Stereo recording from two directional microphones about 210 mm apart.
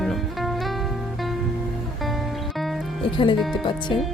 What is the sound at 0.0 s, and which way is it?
Music, centre (ahead or behind).